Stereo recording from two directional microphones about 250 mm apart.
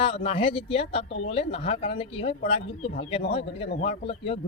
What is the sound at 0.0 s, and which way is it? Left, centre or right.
Speech, left.